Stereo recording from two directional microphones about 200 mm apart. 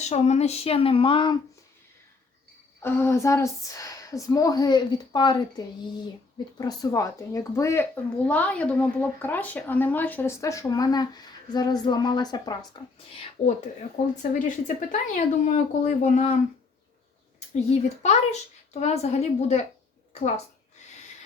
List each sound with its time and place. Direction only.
0.0 s speech: 35° left (ahead or behind)
2.8 s speech: 10° left (ahead or behind); by 13.5 s 30° left (ahead or behind)
13.9 s speech: 40° left (ahead or behind)
17.5 s speech: 35° left (ahead or behind)